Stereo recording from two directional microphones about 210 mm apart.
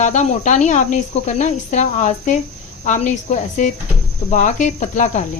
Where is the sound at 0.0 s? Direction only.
35° left (ahead or behind).